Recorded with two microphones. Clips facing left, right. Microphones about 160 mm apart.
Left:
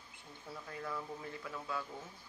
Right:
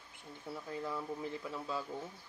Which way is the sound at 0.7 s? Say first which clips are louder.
Right 3 dB; 20° right (ahead or behind).